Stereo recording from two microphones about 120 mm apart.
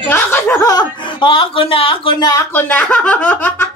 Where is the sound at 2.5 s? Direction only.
15° left (ahead or behind).